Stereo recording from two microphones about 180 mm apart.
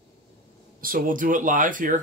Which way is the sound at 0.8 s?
50° right (ahead or behind).